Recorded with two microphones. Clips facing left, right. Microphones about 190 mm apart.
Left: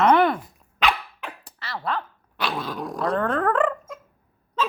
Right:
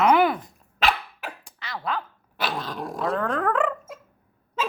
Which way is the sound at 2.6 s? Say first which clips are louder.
Left 1 dB; centre (ahead or behind).